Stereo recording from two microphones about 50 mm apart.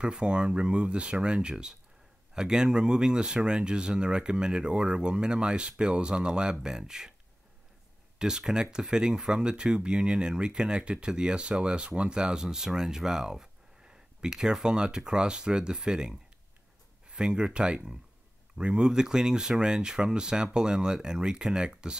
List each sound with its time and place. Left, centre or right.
0.0 s speech: centre
8.2 s speech: centre